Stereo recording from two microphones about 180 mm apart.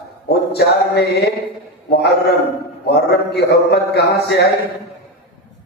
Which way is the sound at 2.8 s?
65° left (ahead or behind).